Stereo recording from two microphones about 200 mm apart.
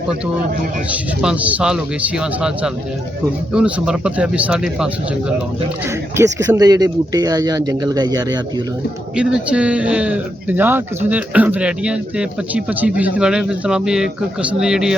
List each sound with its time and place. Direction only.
1.2 s speech: 5° right (ahead or behind)
6.1 s speech: 15° right (ahead or behind)
9.1 s speech: 5° right (ahead or behind)